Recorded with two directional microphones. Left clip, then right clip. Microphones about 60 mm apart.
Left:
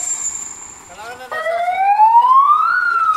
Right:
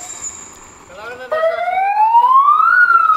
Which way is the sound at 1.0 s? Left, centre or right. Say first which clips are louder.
Right 6 dB; centre.